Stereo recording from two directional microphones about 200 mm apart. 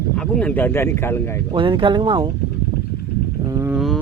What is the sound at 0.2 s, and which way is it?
Speech, 5° left (ahead or behind).